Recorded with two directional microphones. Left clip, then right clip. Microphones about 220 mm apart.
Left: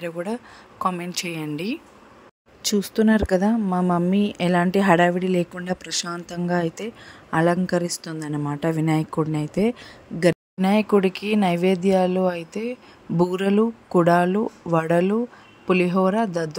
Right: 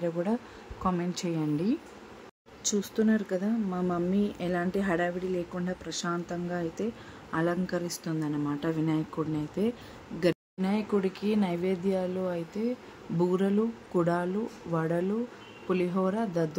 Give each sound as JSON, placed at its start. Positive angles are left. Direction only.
{"t": 0.0, "sound": "speech", "side_deg": 35}